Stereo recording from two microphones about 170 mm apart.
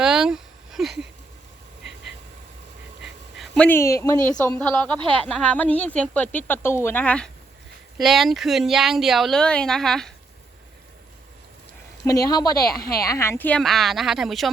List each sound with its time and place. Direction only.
0.0 s a sound: 5° right (ahead or behind)
3.0 s dog: centre (ahead or behind); by 4.2 s 15° left (ahead or behind)
4.3 s speech: 5° left (ahead or behind)
4.9 s speech: 30° right (ahead or behind)
5.4 s speech: 5° left (ahead or behind)
12.0 s speech: 20° left (ahead or behind); by 14.5 s centre (ahead or behind)